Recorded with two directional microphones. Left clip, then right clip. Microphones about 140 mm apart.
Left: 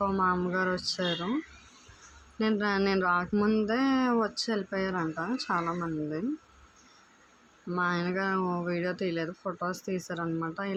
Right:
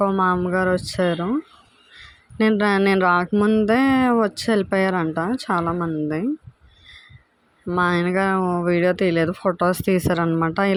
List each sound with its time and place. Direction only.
0.0 s a sound: 50° right (ahead or behind)
0.5 s speech: 50° right (ahead or behind)
2.4 s speech: 55° right (ahead or behind)
3.3 s mantra: 35° right (ahead or behind)
3.7 s speech: 55° right (ahead or behind)
7.8 s speech: 60° right (ahead or behind)